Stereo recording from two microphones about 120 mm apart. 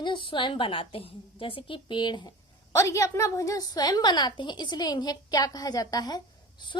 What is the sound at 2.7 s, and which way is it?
A woman's voice, 25° left (ahead or behind).